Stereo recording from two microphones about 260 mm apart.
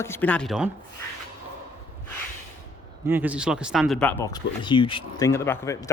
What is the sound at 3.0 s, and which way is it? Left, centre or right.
Speech, centre.